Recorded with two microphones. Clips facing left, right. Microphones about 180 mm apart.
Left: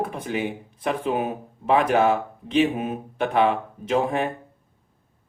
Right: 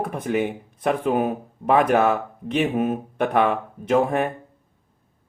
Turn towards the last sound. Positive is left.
turn(degrees=-50)  # may be behind; listen again after turning